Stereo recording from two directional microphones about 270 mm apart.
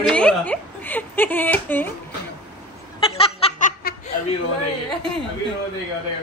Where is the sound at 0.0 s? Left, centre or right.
Centre.